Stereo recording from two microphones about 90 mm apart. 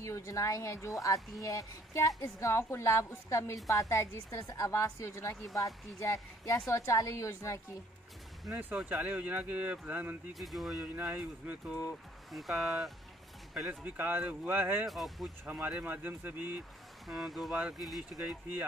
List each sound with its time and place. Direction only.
0.0 s speech: 35° left (ahead or behind)
8.7 s speech: 15° right (ahead or behind)
10.4 s speech: centre (ahead or behind)
11.0 s speech: 15° right (ahead or behind)
12.3 s speech: centre (ahead or behind)
13.7 s speech: 20° right (ahead or behind)
14.9 s speech: centre (ahead or behind)
15.4 s speech: 15° right (ahead or behind)
17.1 s speech: centre (ahead or behind)